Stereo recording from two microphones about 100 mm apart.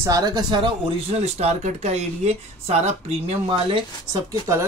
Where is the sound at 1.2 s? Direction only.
90° right.